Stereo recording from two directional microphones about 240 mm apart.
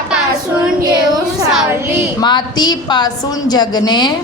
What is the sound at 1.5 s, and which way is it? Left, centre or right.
Speech, centre.